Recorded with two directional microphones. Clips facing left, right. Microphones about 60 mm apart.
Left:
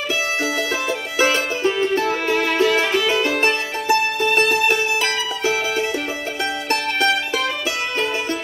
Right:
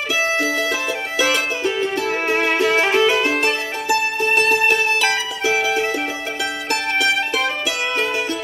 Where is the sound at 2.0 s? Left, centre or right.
Right.